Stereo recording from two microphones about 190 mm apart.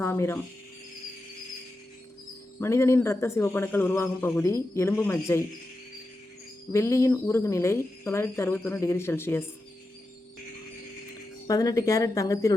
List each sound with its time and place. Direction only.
0.0 s speech: 10° left (ahead or behind)
2.6 s a man's voice: 15° left (ahead or behind)
6.7 s a man's voice: 15° left (ahead or behind)
11.4 s a man's voice: 20° left (ahead or behind)